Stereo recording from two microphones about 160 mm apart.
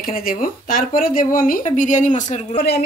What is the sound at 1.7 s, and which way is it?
Speech, 50° left (ahead or behind).